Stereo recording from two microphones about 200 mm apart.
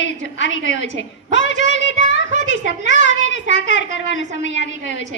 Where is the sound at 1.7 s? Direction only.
65° left (ahead or behind).